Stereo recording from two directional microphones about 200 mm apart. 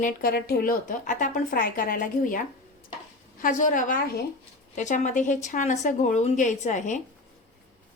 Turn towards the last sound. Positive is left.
turn(degrees=35)  # may be behind; listen again after turning